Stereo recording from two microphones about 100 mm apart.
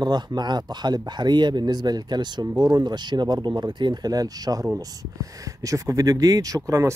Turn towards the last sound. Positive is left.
turn(degrees=-35)  # may be behind; listen again after turning